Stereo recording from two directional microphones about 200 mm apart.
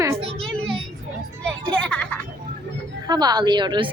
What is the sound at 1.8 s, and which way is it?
Speech, 5° left (ahead or behind).